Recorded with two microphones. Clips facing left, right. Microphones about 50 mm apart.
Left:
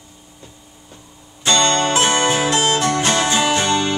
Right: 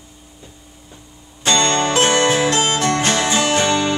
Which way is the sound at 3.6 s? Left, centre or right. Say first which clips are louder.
Right 1 dB; centre.